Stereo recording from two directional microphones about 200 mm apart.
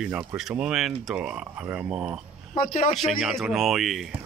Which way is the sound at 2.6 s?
40° left (ahead or behind).